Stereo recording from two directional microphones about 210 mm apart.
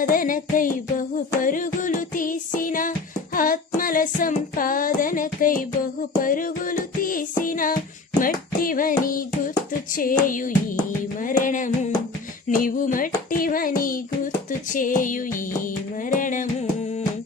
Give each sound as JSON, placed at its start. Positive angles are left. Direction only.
{"t": 0.0, "sound": "music", "side_deg": 40}